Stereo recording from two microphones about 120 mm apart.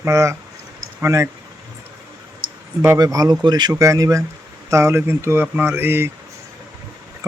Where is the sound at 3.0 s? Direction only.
30° right (ahead or behind).